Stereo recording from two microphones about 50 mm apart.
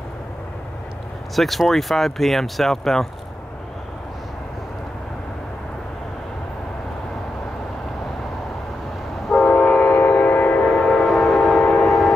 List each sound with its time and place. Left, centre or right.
1.3 s speech: centre
9.5 s train: left
10.7 s train: centre
11.1 s train: centre
11.5 s train: centre